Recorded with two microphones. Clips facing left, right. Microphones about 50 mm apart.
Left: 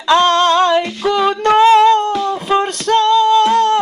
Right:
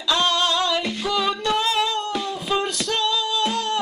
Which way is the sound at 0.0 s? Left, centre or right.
Left.